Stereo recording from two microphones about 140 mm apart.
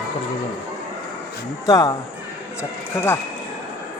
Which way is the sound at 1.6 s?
25° left (ahead or behind).